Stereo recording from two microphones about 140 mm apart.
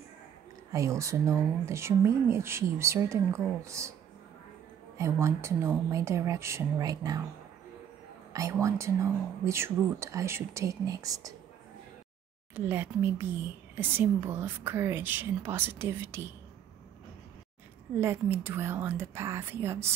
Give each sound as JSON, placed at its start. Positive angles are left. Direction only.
{"t": 0.7, "sound": "speech", "side_deg": -20}
{"t": 4.9, "sound": "speech", "side_deg": -20}
{"t": 8.3, "sound": "speech", "side_deg": -25}
{"t": 12.5, "sound": "a woman's voice", "side_deg": -15}
{"t": 17.9, "sound": "a woman's voice", "side_deg": -20}